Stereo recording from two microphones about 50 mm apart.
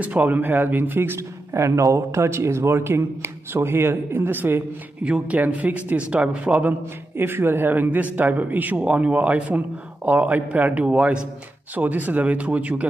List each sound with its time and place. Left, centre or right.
0.0 s a man's voice: right
1.6 s a man's voice: right
5.0 s a man's voice: right
7.2 s a man's voice: right